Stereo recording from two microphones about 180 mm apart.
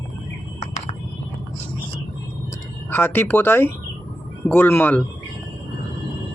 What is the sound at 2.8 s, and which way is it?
Speech, 10° left (ahead or behind).